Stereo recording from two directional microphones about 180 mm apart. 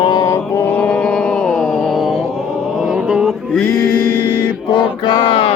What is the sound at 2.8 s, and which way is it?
Music, 5° right (ahead or behind).